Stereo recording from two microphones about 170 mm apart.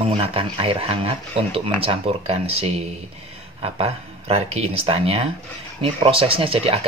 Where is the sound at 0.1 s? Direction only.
35° right (ahead or behind).